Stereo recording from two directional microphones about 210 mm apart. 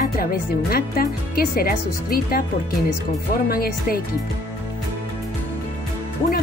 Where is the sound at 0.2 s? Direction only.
45° left (ahead or behind).